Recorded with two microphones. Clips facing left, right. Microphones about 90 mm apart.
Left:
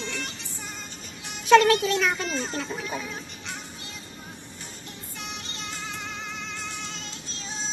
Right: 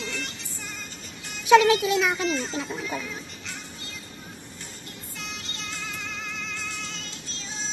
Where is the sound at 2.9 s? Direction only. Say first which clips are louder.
Right 1 dB; 20° left (ahead or behind).